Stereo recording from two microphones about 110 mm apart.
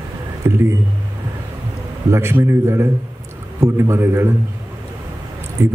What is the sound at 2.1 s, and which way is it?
A man's voice, 25° right (ahead or behind).